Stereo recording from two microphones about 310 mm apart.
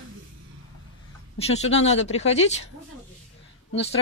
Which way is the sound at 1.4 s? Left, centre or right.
Left.